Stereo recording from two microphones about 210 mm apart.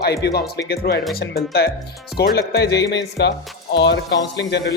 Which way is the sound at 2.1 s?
45° left (ahead or behind).